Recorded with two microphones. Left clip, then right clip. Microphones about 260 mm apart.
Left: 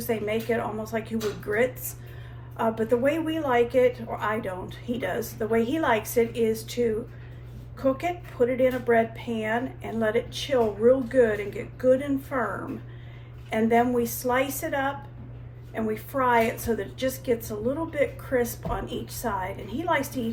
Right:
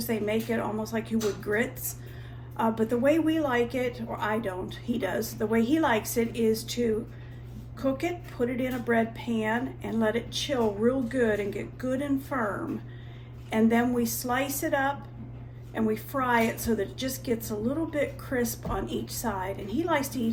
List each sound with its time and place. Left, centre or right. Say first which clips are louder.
0.0 s a woman's voice: left 2 dB; centre
7.8 s a woman's voice: left 4 dB; centre
13.5 s a woman's voice: left 3 dB; centre